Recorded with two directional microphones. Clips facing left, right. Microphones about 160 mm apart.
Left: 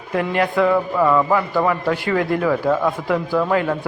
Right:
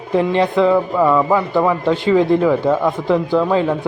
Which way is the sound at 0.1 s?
25° right (ahead or behind).